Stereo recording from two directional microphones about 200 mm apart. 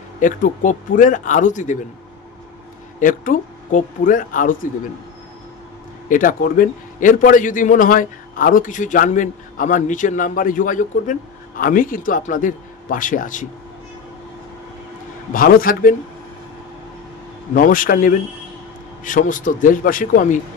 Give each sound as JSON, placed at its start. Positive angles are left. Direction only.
{"t": 0.2, "sound": "a man's voice", "side_deg": 40}
{"t": 3.0, "sound": "a man's voice", "side_deg": 40}
{"t": 6.0, "sound": "a man's voice", "side_deg": 40}
{"t": 15.3, "sound": "a man's voice", "side_deg": 45}
{"t": 17.6, "sound": "a man's voice", "side_deg": 45}